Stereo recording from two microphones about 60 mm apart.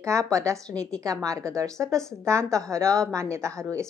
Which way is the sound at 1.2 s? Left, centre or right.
Right.